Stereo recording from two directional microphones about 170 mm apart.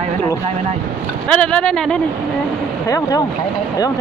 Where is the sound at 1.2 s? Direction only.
5° left (ahead or behind).